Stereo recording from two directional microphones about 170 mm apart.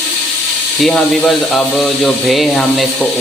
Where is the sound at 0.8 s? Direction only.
Centre (ahead or behind).